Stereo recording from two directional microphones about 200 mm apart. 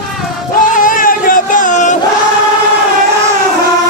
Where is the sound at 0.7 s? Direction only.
40° left (ahead or behind).